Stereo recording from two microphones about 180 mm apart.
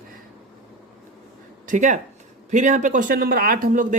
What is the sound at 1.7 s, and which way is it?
Speech, 40° right (ahead or behind).